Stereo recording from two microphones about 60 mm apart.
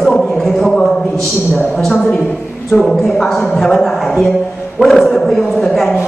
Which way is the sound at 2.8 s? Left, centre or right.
Centre.